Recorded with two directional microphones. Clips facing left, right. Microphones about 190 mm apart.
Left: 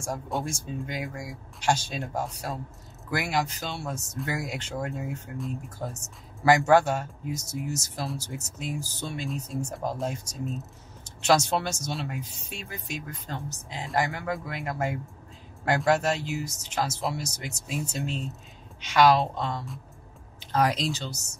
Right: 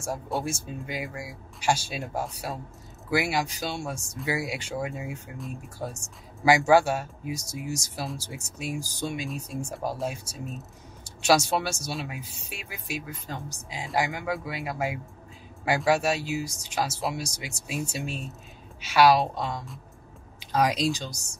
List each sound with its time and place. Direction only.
0.0 s speech: 5° right (ahead or behind)